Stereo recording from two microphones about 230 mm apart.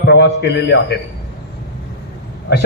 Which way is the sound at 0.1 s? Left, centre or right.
Left.